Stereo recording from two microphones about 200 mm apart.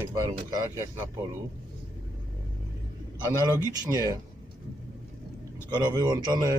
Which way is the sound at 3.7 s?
20° right (ahead or behind).